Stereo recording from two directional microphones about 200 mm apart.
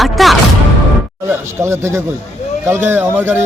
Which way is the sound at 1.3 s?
15° right (ahead or behind).